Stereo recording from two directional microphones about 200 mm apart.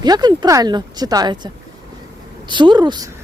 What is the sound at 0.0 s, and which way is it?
Speech, 20° right (ahead or behind).